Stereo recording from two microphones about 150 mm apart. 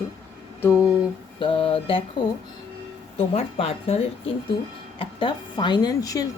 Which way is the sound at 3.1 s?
45° left (ahead or behind).